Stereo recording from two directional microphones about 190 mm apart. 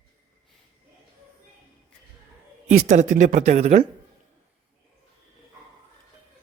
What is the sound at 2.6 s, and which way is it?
A man's voice, 40° right (ahead or behind).